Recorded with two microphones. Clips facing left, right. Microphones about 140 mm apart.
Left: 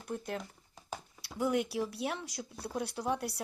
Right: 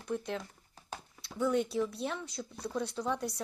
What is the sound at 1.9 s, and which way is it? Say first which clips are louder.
Speech: even; 65° left (ahead or behind).